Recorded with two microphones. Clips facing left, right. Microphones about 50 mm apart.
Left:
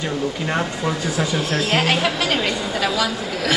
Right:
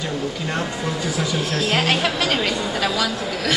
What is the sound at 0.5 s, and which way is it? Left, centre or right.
Speech, centre.